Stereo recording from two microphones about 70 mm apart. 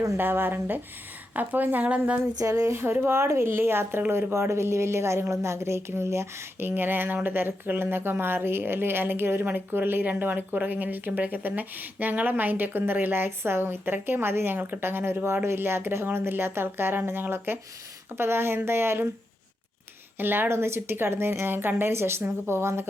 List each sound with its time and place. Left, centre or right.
0.2 s speech: right
2.4 s a sound: right
2.7 s speech: right
20.1 s speech: right